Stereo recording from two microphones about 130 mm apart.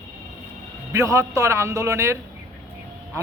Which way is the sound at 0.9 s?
25° right (ahead or behind).